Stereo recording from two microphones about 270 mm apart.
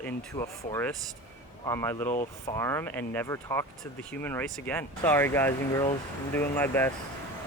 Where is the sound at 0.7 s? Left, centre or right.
Centre.